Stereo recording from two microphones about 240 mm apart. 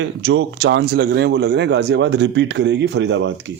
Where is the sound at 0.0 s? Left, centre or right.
Right.